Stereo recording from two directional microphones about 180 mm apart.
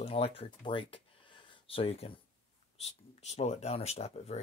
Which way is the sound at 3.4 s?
35° left (ahead or behind).